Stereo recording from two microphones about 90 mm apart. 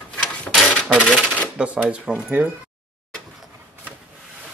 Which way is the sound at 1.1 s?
10° left (ahead or behind).